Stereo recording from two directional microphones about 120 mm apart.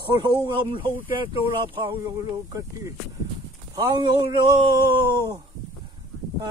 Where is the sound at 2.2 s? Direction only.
25° right (ahead or behind).